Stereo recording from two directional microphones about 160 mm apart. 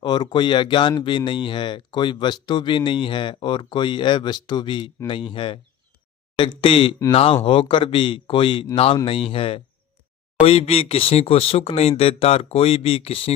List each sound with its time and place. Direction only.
0.0 s speech: 25° left (ahead or behind)